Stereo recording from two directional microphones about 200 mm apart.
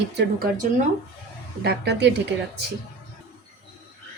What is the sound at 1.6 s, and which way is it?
Dishes, 55° right (ahead or behind).